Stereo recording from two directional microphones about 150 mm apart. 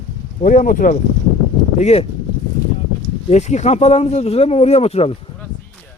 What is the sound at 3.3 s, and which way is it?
Speech, 50° left (ahead or behind).